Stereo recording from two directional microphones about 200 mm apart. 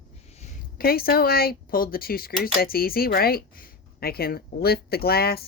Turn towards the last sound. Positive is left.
turn(degrees=50)  # may be behind; listen again after turning